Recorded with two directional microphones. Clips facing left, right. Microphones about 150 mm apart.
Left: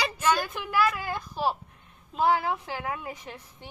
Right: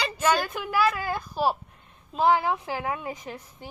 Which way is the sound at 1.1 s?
10° right (ahead or behind).